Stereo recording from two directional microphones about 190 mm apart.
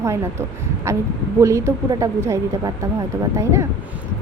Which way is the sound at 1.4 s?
15° right (ahead or behind).